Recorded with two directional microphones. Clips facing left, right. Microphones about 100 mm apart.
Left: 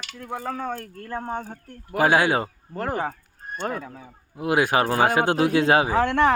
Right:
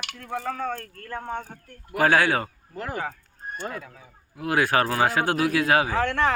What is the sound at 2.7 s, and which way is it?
Speech, 45° left (ahead or behind).